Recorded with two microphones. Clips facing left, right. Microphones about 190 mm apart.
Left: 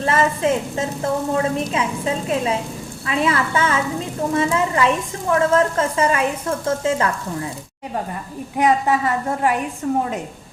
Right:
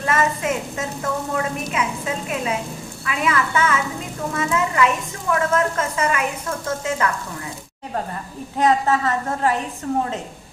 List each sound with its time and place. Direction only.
0.0 s a woman's voice: 30° left (ahead or behind)
8.5 s a woman's voice: 15° left (ahead or behind)